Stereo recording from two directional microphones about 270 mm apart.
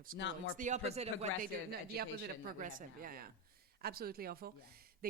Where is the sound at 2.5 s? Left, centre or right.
Right.